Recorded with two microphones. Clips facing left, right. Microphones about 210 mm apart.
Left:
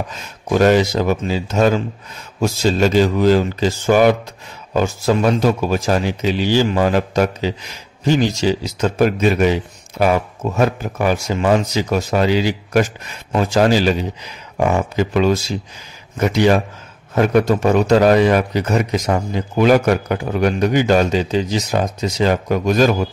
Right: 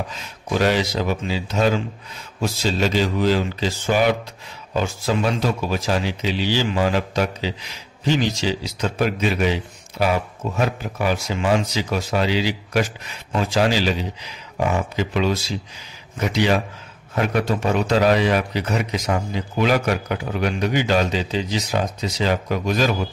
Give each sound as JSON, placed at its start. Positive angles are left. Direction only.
{"t": 0.1, "sound": "a man's voice", "side_deg": 45}